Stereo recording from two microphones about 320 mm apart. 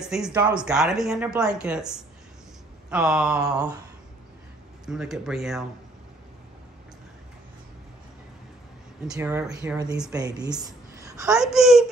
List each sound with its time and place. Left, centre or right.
0.0 s speech: centre
4.8 s speech: centre
9.0 s speech: centre